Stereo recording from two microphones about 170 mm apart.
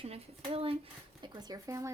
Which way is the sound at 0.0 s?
35° right (ahead or behind).